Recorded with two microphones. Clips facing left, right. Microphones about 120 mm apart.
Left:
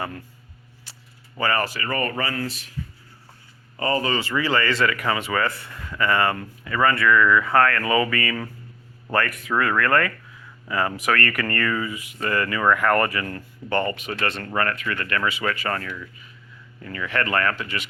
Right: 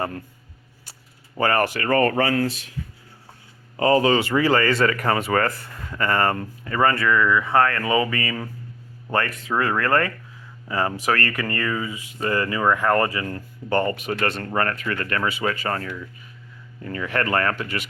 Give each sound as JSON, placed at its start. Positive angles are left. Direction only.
{"t": 1.4, "sound": "speech", "side_deg": -55}
{"t": 3.8, "sound": "speech", "side_deg": -65}
{"t": 11.4, "sound": "speech", "side_deg": -20}
{"t": 13.7, "sound": "speech", "side_deg": -35}
{"t": 15.4, "sound": "speech", "side_deg": -25}
{"t": 16.8, "sound": "speech", "side_deg": -35}